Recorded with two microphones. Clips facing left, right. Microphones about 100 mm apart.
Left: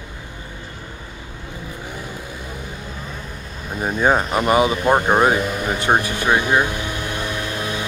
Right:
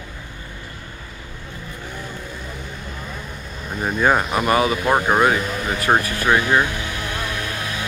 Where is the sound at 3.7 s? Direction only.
5° left (ahead or behind).